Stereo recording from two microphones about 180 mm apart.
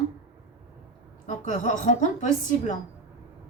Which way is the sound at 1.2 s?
45° left (ahead or behind).